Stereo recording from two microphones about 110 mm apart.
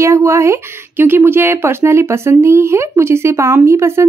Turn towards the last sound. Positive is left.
turn(degrees=-25)  # may be behind; listen again after turning